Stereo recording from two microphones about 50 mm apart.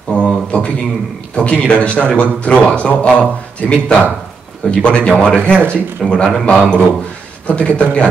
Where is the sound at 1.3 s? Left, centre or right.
Left.